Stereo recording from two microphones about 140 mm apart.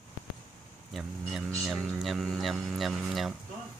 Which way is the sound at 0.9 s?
Centre (ahead or behind).